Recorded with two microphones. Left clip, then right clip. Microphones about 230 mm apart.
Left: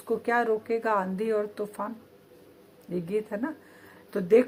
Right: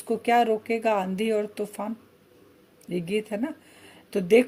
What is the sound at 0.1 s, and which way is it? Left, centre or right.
Speech, right.